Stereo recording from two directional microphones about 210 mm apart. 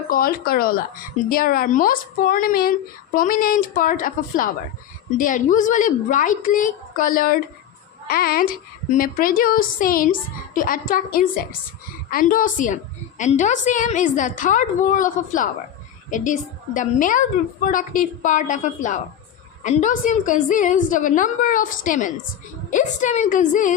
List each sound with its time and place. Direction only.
0.1 s a woman's voice: 45° left (ahead or behind)